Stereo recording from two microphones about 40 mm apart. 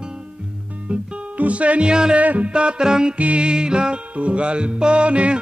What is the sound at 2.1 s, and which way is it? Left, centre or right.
Music, right.